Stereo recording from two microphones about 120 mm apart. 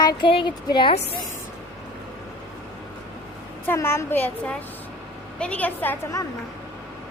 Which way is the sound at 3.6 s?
20° left (ahead or behind).